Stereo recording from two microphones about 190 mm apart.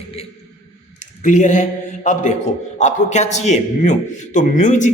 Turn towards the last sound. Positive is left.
turn(degrees=40)  # may be behind; listen again after turning